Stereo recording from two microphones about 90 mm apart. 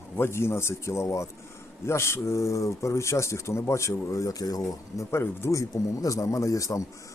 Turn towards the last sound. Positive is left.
turn(degrees=35)  # may be behind; listen again after turning